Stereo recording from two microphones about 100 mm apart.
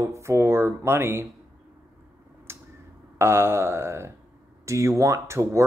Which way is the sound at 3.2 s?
25° right (ahead or behind).